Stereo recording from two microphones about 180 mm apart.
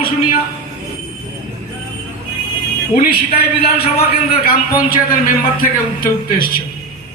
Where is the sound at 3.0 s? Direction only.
55° left (ahead or behind).